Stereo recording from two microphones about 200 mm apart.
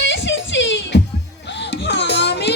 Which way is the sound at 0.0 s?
60° left (ahead or behind).